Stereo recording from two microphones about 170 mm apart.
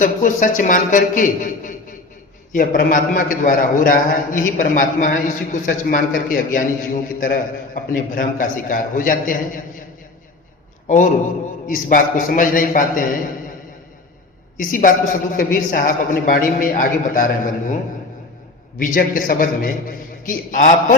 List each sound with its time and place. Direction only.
0.0 s a man's voice: 50° left (ahead or behind)
10.8 s a man's voice: 50° left (ahead or behind)
14.7 s a man's voice: 50° left (ahead or behind)
18.8 s a man's voice: 55° left (ahead or behind)